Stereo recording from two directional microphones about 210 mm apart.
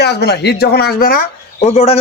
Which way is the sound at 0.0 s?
50° left (ahead or behind).